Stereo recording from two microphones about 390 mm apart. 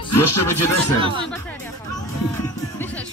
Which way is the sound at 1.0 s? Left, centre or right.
Centre.